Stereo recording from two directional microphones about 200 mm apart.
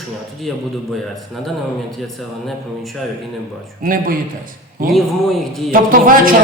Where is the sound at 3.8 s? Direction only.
45° right (ahead or behind).